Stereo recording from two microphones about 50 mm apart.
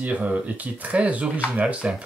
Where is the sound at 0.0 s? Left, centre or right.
Right.